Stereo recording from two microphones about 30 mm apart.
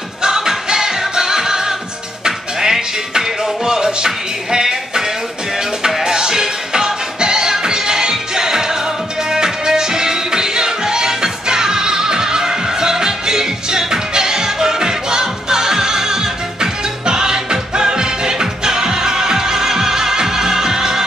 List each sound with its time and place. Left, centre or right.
0.2 s music: right